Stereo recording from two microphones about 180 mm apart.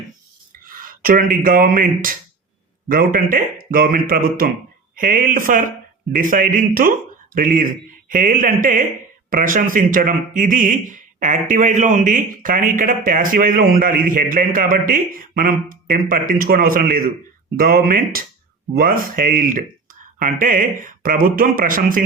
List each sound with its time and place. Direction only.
0.7 s speech: 50° right (ahead or behind)